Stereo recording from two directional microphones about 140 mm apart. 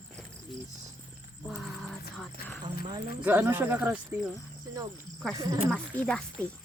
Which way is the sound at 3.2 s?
15° right (ahead or behind).